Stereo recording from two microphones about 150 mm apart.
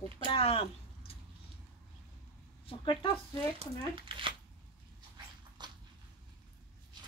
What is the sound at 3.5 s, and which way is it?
Speech, 35° right (ahead or behind).